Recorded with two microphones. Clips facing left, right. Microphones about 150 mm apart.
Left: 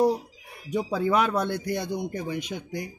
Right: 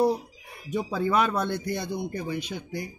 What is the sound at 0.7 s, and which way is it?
Speech, 15° left (ahead or behind).